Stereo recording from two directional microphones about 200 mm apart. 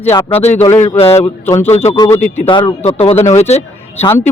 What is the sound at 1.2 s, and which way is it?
Speech, 15° left (ahead or behind).